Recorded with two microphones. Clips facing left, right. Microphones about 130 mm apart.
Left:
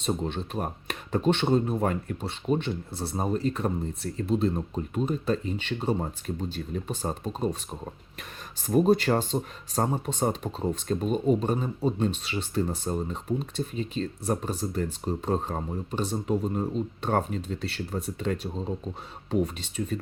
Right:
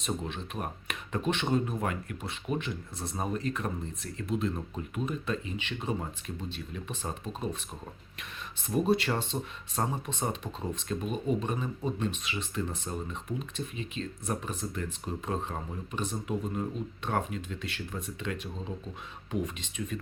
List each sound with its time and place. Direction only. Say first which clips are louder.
0.0 s speech: left 6 dB; 30° left (ahead or behind)